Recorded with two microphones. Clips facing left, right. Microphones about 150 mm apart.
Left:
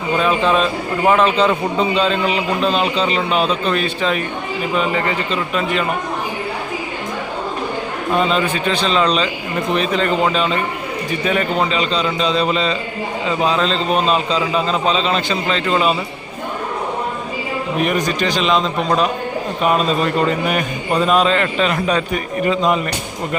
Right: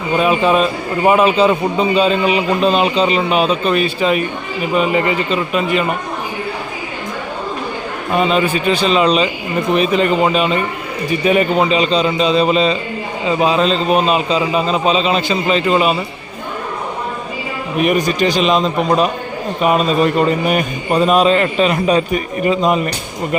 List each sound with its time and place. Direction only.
0.2 s a man's voice: 10° right (ahead or behind)
8.1 s a man's voice: 10° right (ahead or behind)
17.8 s a man's voice: 10° right (ahead or behind)